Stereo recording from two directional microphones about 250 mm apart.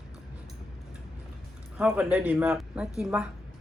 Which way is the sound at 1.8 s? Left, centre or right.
Centre.